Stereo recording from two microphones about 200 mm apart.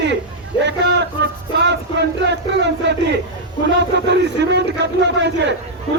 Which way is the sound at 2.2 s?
60° right (ahead or behind).